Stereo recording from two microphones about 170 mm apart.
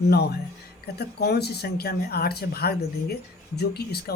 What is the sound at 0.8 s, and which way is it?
Speech, 70° left (ahead or behind).